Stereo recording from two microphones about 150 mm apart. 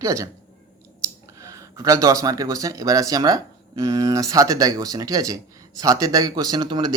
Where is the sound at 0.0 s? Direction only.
20° right (ahead or behind).